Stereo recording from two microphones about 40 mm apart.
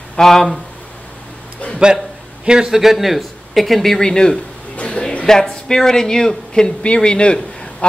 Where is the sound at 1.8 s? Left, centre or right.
Right.